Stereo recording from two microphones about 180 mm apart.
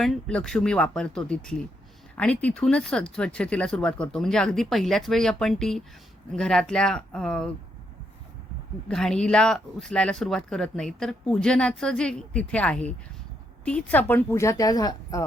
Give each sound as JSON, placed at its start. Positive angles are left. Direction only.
{"t": 0.0, "sound": "speech", "side_deg": 5}
{"t": 8.9, "sound": "a woman's voice", "side_deg": 5}